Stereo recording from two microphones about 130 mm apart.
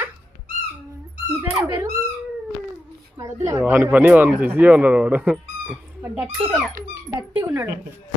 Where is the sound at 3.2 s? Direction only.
30° right (ahead or behind).